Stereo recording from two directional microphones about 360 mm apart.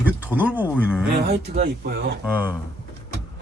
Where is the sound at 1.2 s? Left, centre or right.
Right.